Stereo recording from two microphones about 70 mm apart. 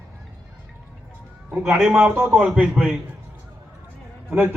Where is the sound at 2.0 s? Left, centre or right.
Right.